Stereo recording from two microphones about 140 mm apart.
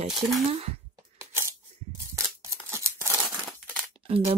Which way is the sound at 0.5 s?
45° right (ahead or behind).